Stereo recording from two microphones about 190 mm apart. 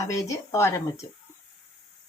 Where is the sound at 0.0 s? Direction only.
15° left (ahead or behind).